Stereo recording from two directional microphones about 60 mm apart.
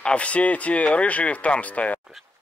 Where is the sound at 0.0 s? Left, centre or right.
Centre.